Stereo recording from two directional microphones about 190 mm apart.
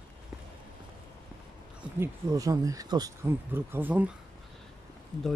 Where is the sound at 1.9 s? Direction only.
15° right (ahead or behind).